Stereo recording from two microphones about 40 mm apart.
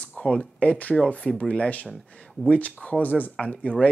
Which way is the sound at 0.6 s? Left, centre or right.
Left.